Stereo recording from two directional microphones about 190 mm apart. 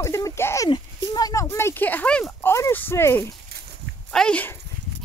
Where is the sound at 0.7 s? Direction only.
20° left (ahead or behind).